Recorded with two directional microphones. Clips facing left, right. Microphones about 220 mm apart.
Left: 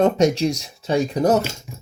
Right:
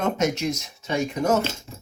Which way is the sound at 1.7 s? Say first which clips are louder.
Left 2 dB; 10° left (ahead or behind).